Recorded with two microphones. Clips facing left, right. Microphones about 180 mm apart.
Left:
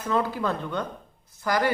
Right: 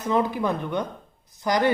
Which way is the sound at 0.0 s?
15° right (ahead or behind).